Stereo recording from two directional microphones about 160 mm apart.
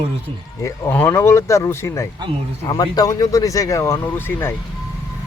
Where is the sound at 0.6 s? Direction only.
15° left (ahead or behind).